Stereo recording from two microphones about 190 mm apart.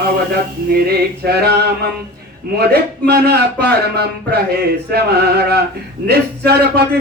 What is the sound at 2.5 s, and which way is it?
Speech, 55° right (ahead or behind).